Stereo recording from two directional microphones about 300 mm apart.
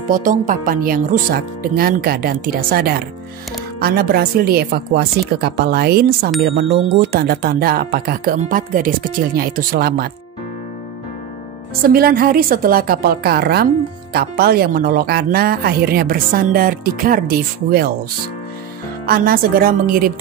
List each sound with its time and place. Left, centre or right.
0.1 s a woman's voice: right
11.8 s speech: right
19.0 s speech: right